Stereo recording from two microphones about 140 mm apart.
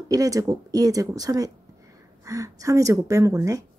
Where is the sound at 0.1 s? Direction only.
25° right (ahead or behind).